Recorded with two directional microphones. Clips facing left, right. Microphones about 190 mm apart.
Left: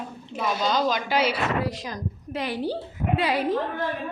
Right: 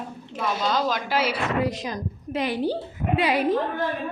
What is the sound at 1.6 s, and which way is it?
A woman's voice, 20° right (ahead or behind).